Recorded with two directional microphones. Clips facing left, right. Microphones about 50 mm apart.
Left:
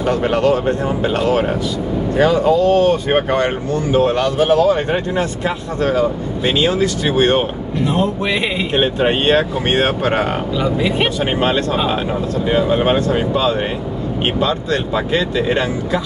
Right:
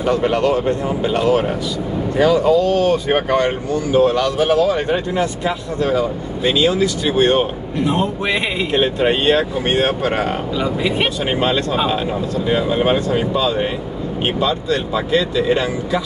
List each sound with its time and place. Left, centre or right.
0.1 s speech: left
2.2 s speech: left
7.8 s a man's voice: centre
8.7 s speech: left
10.6 s speech: centre
14.4 s speech: left